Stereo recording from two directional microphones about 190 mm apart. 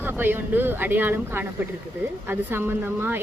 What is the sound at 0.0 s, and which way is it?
Speech, 10° right (ahead or behind).